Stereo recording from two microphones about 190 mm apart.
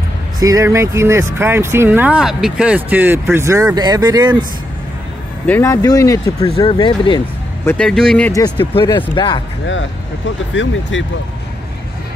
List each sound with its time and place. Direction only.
0.4 s speech: 15° right (ahead or behind)
5.5 s speech: 15° left (ahead or behind)
6.5 s speech: 30° left (ahead or behind)
7.6 s speech: 5° left (ahead or behind)
8.5 s speech: 25° left (ahead or behind)
10.5 s speech: 75° left (ahead or behind)